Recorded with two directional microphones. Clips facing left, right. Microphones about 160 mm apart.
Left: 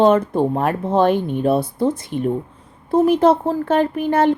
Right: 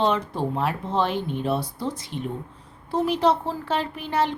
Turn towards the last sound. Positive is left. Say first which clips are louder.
# left 9 dB
turn(degrees=50)  # may be behind; listen again after turning